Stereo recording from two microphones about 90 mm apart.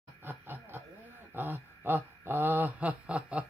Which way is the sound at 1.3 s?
20° right (ahead or behind).